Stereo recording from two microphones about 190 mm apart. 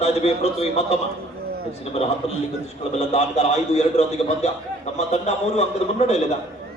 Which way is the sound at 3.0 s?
35° left (ahead or behind).